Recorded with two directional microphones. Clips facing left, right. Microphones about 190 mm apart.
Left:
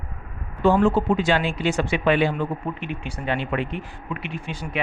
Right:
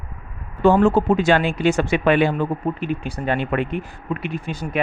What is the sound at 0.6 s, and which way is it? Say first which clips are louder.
Speech: right 3 dB; 45° right (ahead or behind).